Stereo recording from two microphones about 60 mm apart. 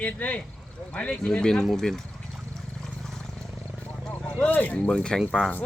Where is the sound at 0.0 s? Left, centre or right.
Left.